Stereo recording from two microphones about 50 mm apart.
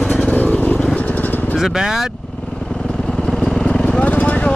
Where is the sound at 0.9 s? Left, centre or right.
Left.